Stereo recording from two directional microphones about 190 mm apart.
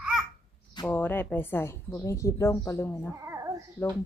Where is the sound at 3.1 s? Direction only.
15° right (ahead or behind).